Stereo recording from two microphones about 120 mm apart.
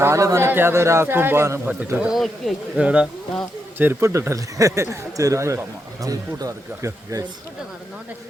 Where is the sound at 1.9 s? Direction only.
10° right (ahead or behind).